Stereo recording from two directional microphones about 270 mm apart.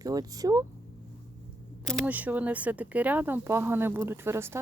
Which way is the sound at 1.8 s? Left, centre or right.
Centre.